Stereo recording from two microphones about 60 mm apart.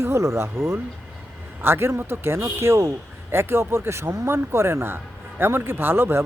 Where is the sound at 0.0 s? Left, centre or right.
Right.